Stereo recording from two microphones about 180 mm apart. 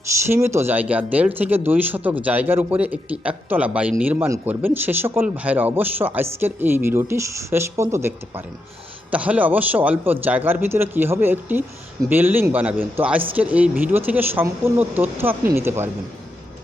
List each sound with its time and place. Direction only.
0.3 s speech: 15° right (ahead or behind)